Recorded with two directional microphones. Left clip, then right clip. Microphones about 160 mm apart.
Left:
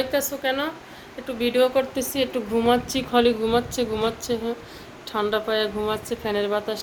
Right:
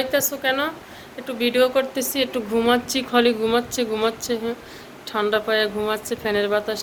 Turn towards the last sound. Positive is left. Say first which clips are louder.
# right 3 dB
turn(degrees=10)  # may be behind; listen again after turning